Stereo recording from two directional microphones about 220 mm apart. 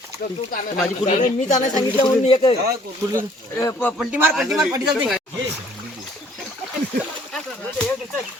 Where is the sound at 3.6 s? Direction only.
10° left (ahead or behind).